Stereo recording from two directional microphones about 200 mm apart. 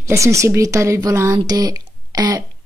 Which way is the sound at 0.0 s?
15° right (ahead or behind).